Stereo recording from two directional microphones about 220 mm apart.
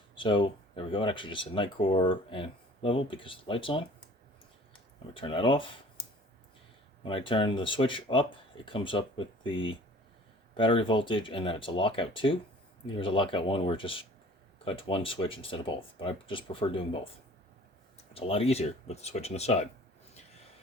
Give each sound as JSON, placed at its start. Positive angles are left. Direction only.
{"t": 0.2, "sound": "speech", "side_deg": 20}
{"t": 5.1, "sound": "speech", "side_deg": 25}
{"t": 7.0, "sound": "speech", "side_deg": 25}
{"t": 18.1, "sound": "speech", "side_deg": 25}